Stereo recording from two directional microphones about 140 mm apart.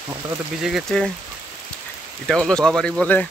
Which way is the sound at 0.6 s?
Centre (ahead or behind).